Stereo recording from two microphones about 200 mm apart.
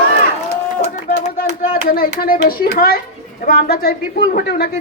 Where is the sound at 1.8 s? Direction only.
45° left (ahead or behind).